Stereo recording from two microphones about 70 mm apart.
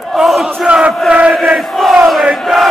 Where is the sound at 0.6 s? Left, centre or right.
Centre.